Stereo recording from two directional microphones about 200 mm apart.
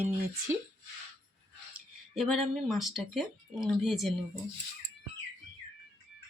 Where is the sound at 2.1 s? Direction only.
Centre (ahead or behind).